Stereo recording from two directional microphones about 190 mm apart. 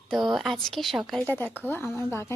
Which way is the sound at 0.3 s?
Centre (ahead or behind).